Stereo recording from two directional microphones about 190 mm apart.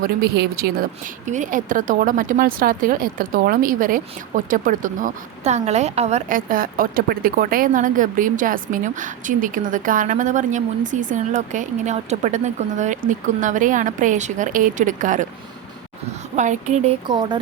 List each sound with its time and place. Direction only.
0.0 s speech: 55° right (ahead or behind)
1.3 s speech: 40° right (ahead or behind)
16.3 s speech: 40° right (ahead or behind)
17.1 s speech: 25° right (ahead or behind)